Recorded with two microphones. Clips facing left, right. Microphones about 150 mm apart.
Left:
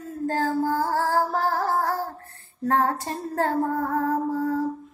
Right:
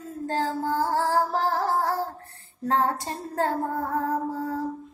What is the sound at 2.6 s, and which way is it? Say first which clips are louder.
Female singing: left 2 dB; 20° right (ahead or behind).